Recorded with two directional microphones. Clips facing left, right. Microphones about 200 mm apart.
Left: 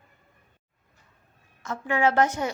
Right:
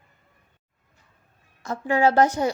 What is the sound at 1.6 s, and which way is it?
Speech, 35° right (ahead or behind).